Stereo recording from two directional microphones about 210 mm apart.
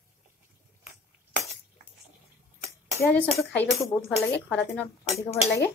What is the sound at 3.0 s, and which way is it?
Speech, 5° left (ahead or behind).